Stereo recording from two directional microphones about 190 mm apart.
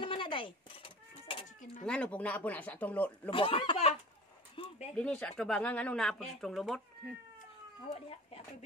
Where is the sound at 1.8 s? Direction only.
5° left (ahead or behind).